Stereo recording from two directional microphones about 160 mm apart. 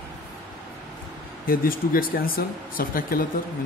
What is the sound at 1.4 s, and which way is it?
Speech, 65° left (ahead or behind).